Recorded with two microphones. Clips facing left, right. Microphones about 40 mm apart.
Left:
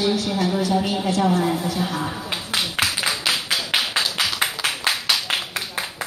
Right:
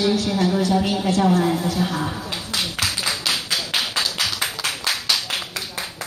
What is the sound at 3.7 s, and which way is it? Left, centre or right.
Clapping, left.